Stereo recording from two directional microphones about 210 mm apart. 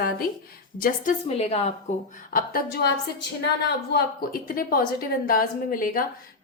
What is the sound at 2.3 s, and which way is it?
A woman's voice, 45° left (ahead or behind).